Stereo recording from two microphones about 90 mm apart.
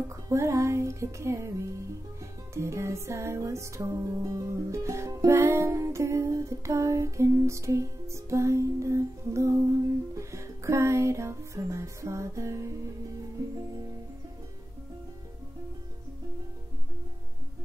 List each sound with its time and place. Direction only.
0.1 s music: 35° right (ahead or behind)